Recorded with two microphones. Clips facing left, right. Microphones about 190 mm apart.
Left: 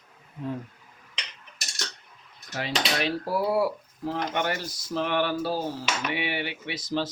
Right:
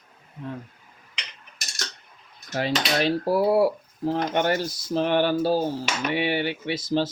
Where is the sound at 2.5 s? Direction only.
35° right (ahead or behind).